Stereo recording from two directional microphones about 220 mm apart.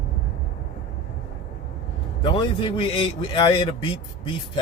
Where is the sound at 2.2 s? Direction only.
20° left (ahead or behind).